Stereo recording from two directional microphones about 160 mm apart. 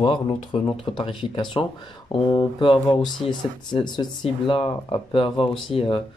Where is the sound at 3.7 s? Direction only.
25° left (ahead or behind).